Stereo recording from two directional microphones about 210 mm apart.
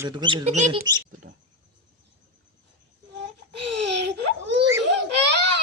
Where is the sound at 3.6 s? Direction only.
55° right (ahead or behind).